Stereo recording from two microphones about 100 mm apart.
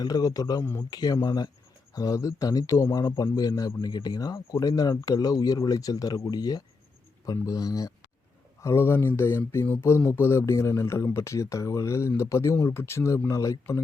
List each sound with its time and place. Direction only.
0.0 s a man's voice: 40° left (ahead or behind)
0.6 s speech: 25° left (ahead or behind)
0.9 s a man's voice: 40° left (ahead or behind)
8.6 s speech: 25° left (ahead or behind)